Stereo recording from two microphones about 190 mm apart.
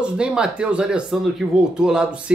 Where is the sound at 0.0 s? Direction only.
5° right (ahead or behind).